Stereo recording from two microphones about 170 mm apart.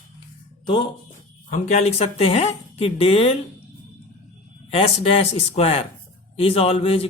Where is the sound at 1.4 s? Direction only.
45° left (ahead or behind).